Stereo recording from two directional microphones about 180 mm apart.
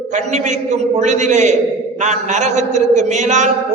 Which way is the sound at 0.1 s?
40° right (ahead or behind).